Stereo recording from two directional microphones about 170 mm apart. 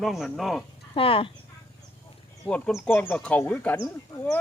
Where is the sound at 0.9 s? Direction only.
30° left (ahead or behind).